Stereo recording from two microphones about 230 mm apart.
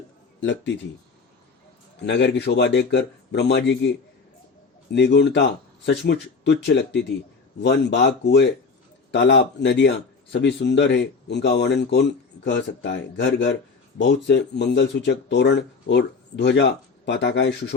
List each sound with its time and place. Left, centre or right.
0.3 s speech: left
2.0 s speech: left
4.9 s speech: left